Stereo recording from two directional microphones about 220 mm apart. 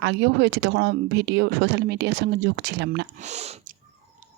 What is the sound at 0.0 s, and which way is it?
Speech, 50° right (ahead or behind).